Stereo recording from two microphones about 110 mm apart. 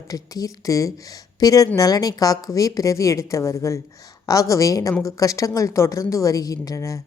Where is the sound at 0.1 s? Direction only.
30° left (ahead or behind).